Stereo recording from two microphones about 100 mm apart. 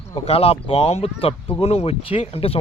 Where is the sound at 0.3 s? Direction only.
80° left.